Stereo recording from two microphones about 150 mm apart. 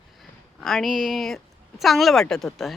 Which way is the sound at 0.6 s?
Centre (ahead or behind).